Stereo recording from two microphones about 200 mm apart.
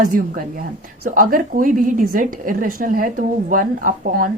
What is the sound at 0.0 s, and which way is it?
A woman's voice, 45° right (ahead or behind).